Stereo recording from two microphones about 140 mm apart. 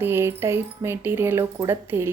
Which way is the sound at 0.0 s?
15° right (ahead or behind).